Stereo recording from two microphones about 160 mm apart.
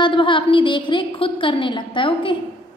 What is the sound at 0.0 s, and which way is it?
A woman's voice, 30° left (ahead or behind).